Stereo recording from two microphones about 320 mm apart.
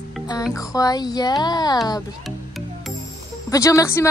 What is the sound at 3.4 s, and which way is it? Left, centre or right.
Speech, centre.